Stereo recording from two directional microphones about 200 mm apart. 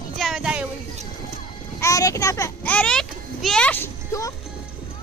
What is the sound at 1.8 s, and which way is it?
Children playing, 15° left (ahead or behind).